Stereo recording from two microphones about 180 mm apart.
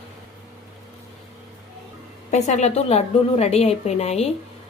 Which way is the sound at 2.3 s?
40° left (ahead or behind).